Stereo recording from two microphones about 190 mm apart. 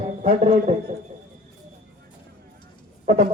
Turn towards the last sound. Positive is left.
turn(degrees=-35)  # may be behind; listen again after turning